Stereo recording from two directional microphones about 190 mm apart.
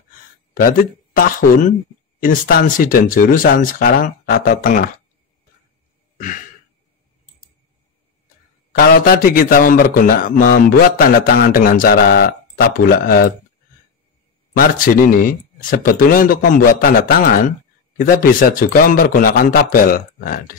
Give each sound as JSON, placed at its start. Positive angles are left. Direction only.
{"t": 0.6, "sound": "a man's voice", "side_deg": 50}
{"t": 6.1, "sound": "sigh", "side_deg": 45}
{"t": 8.7, "sound": "a man's voice", "side_deg": 50}
{"t": 14.6, "sound": "a man's voice", "side_deg": 45}